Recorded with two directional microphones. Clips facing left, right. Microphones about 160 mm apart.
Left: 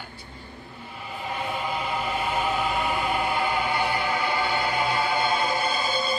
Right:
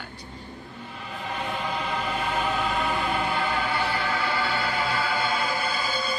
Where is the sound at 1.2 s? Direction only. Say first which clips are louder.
Left 1 dB; 5° left (ahead or behind).